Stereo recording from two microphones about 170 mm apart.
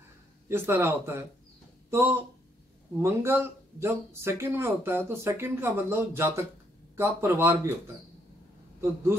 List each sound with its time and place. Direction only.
0.5 s speech: 15° right (ahead or behind)